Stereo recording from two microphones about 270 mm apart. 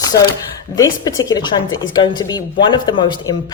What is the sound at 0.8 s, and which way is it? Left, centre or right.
Speech, centre.